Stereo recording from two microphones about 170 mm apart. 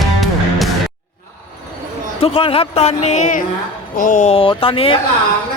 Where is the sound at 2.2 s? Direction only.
35° left (ahead or behind); by 4.3 s 50° left (ahead or behind).